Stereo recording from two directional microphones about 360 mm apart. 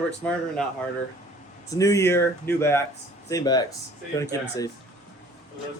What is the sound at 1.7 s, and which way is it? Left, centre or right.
Speech, centre.